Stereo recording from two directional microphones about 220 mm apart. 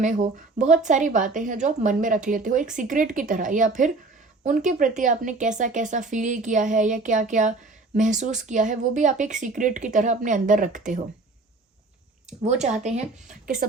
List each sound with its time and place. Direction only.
0.0 s speech: 35° right (ahead or behind)
12.5 s speech: 30° right (ahead or behind)